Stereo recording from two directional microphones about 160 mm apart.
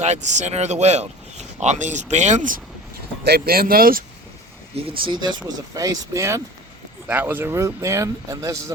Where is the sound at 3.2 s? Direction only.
75° right (ahead or behind).